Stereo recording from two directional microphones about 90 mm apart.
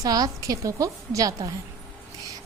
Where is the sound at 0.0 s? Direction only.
40° right (ahead or behind).